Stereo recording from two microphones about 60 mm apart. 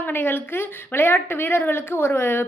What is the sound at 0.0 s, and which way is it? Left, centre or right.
A woman's voice, left.